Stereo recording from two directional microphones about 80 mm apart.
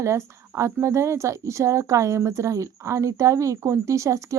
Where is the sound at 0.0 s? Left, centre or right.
Right.